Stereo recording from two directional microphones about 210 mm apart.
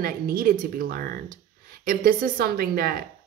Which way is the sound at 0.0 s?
45° right (ahead or behind).